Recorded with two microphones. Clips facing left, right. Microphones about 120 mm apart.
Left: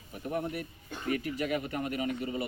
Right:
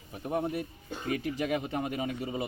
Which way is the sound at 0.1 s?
30° right (ahead or behind).